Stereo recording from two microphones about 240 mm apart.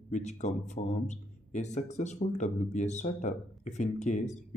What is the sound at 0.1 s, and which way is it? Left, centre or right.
A man's voice, left.